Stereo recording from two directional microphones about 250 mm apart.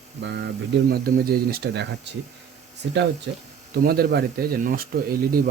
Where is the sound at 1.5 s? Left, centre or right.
Right.